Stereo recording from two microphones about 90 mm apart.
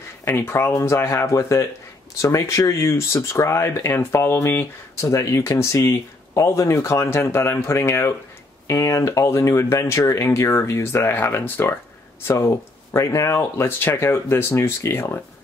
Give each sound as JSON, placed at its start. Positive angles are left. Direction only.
{"t": 0.2, "sound": "speech", "side_deg": 30}
{"t": 12.3, "sound": "speech", "side_deg": 35}